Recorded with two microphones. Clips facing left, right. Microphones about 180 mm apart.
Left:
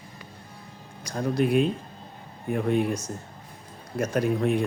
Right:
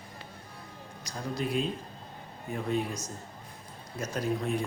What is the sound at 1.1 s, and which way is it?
Speech, 60° left (ahead or behind).